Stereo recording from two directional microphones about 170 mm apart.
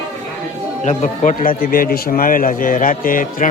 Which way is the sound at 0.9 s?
45° left (ahead or behind).